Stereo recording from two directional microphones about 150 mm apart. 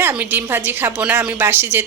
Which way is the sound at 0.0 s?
10° right (ahead or behind).